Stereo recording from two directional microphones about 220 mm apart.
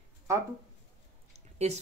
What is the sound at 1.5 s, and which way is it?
Speech, 30° right (ahead or behind).